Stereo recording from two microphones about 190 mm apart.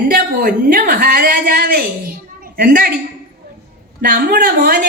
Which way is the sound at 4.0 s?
55° right (ahead or behind).